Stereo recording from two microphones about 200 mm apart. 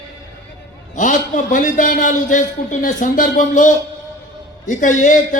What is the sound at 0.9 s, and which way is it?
A man's voice, 40° left (ahead or behind).